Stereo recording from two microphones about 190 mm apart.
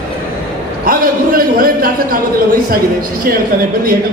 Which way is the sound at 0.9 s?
50° right (ahead or behind).